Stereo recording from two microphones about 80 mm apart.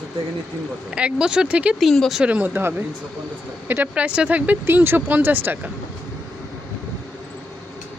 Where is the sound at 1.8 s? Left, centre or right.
Centre.